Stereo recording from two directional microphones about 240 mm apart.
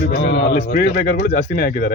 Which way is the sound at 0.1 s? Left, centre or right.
Left.